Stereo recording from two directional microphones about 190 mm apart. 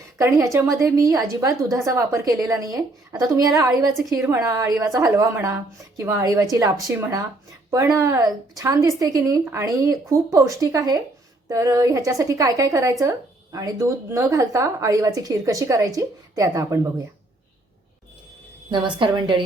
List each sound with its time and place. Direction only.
0.2 s a woman's voice: 15° right (ahead or behind)
3.9 s a woman's voice: centre (ahead or behind)
4.4 s a woman's voice: 15° right (ahead or behind)
18.7 s a woman's voice: 25° right (ahead or behind)